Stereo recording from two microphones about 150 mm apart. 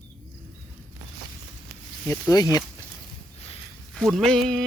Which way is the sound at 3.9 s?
5° left (ahead or behind).